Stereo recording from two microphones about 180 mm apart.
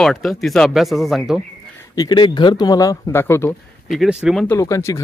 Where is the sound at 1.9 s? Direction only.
25° left (ahead or behind).